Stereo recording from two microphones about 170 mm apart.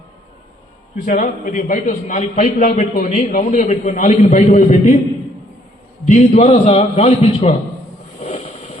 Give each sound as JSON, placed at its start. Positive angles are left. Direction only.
{"t": 0.9, "sound": "a man's voice", "side_deg": 50}
{"t": 6.1, "sound": "a man's voice", "side_deg": 40}
{"t": 8.2, "sound": "a sound", "side_deg": 40}